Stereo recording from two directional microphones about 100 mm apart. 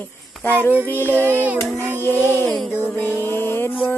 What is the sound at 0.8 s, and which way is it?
Music, 20° left (ahead or behind).